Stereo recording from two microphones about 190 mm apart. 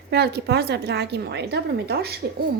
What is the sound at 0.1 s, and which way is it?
A woman's voice, 60° right (ahead or behind).